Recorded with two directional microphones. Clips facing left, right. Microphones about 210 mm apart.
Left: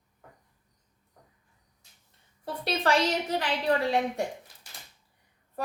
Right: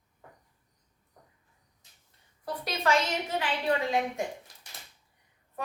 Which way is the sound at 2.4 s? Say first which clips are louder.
Left 2 dB; 30° left (ahead or behind).